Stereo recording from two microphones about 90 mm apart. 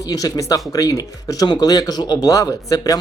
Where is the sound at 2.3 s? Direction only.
35° left (ahead or behind).